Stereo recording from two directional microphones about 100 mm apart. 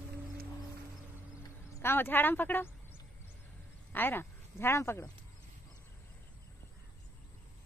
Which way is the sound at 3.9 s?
20° left (ahead or behind).